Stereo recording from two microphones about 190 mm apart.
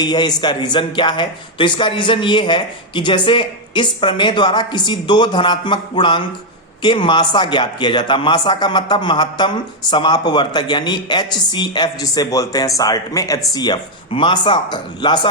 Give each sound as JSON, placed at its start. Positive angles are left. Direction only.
{"t": 0.0, "sound": "a man's voice", "side_deg": 20}